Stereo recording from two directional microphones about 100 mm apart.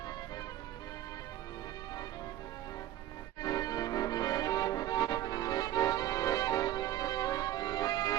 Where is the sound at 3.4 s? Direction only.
35° left (ahead or behind).